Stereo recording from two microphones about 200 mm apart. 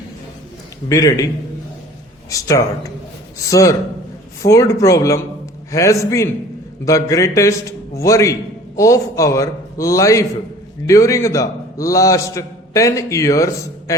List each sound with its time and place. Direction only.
0.9 s a man's voice: 15° left (ahead or behind)
2.3 s a man's voice: 15° left (ahead or behind)